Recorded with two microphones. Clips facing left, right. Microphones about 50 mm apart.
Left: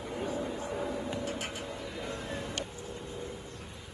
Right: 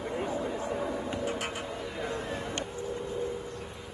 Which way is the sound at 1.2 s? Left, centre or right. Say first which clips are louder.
Right 4 dB; right.